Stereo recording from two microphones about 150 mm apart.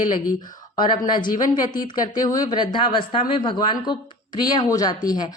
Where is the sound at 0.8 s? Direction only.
30° left (ahead or behind).